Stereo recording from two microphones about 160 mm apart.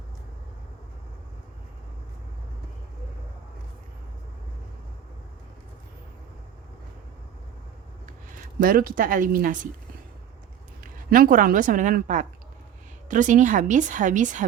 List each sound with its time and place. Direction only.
8.5 s a woman's voice: 65° right (ahead or behind)
11.1 s a woman's voice: 60° right (ahead or behind)